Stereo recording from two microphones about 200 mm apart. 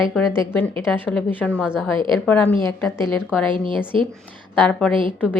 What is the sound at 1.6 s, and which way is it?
Speech, 5° right (ahead or behind).